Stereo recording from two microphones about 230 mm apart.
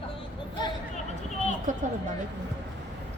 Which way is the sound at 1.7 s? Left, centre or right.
Right.